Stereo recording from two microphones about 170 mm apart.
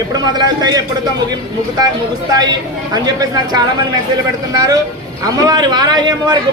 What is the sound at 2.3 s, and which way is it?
A man's voice, 25° right (ahead or behind).